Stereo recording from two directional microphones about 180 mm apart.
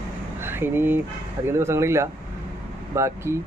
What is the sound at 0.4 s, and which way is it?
Speech, 10° right (ahead or behind).